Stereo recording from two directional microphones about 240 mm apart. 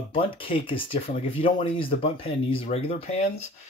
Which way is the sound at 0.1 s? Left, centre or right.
Left.